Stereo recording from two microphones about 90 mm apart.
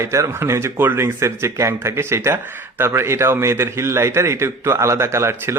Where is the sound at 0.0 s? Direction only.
30° right (ahead or behind).